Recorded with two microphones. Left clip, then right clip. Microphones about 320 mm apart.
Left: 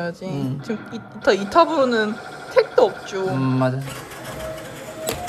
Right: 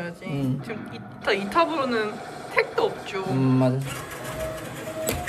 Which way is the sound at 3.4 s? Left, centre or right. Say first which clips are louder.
Right 1 dB; left.